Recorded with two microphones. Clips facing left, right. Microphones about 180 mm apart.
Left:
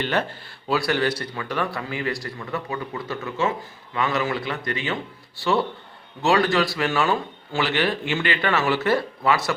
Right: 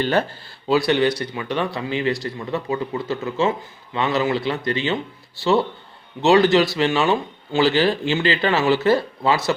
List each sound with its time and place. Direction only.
0.0 s speech: 35° right (ahead or behind)
0.7 s speech: 20° right (ahead or behind)
6.2 s speech: 25° right (ahead or behind)